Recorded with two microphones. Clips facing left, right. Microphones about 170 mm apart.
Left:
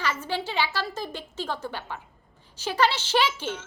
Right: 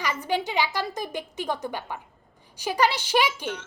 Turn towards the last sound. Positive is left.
turn(degrees=-15)  # may be behind; listen again after turning